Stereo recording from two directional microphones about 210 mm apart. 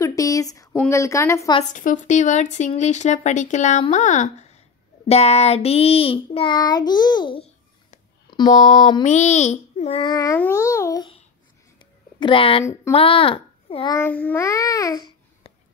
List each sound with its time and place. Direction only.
0.0 s a sound: 15° left (ahead or behind)
0.7 s speech: 15° left (ahead or behind)
1.7 s speech: 40° left (ahead or behind)
5.0 s child singing: 30° left (ahead or behind)
9.0 s a child's voice: 35° left (ahead or behind)
12.2 s a child's voice: 25° left (ahead or behind)